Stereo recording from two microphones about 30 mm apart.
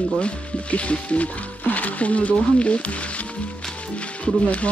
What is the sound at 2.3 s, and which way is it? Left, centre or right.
Speech, left.